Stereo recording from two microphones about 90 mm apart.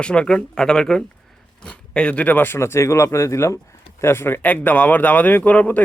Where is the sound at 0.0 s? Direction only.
10° left (ahead or behind).